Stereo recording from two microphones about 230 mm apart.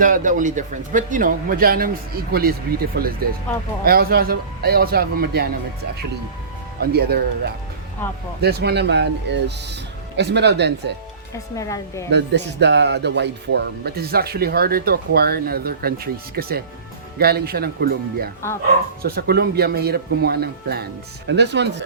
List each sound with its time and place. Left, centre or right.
0.0 s speech: right
6.9 s speech: right
11.5 s a woman's voice: centre
12.1 s speech: right